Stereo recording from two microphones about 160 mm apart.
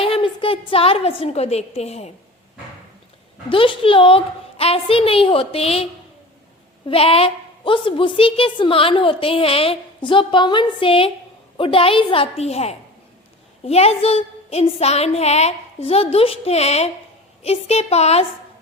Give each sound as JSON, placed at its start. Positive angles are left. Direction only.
{"t": 0.0, "sound": "a woman's voice", "side_deg": 35}
{"t": 3.5, "sound": "a woman's voice", "side_deg": 35}